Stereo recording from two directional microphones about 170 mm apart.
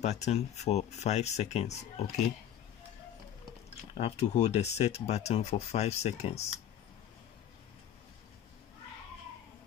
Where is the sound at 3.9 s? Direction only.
35° left (ahead or behind).